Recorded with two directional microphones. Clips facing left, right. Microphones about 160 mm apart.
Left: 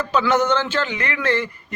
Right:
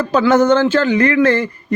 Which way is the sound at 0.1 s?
45° right (ahead or behind).